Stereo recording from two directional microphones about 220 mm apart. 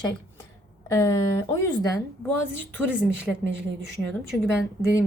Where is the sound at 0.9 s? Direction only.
15° left (ahead or behind).